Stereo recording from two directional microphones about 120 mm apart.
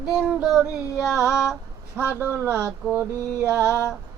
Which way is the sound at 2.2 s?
15° right (ahead or behind).